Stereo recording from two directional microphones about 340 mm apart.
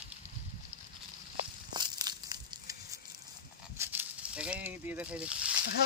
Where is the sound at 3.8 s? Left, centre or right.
Centre.